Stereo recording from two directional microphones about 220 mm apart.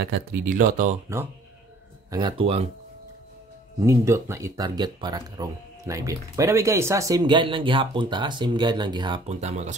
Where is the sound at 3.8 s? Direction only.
15° right (ahead or behind).